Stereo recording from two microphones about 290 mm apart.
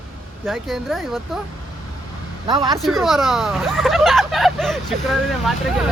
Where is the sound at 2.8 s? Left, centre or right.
Centre.